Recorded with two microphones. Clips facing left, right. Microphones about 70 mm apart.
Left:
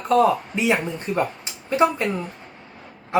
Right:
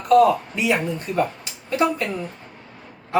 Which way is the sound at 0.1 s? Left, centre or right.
Left.